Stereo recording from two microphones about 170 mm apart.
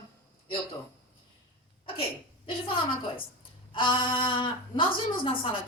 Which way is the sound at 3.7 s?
30° left (ahead or behind).